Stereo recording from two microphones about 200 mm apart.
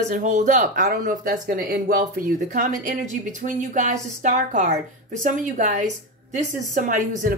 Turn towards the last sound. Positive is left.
turn(degrees=-40)  # may be behind; listen again after turning